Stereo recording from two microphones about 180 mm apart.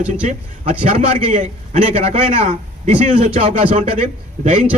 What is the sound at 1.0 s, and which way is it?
A man's voice, 45° right (ahead or behind).